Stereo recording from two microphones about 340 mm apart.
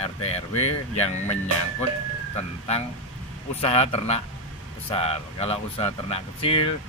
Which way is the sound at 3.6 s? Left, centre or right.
Centre.